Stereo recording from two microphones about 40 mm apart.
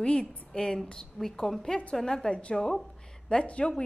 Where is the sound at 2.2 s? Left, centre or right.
Left.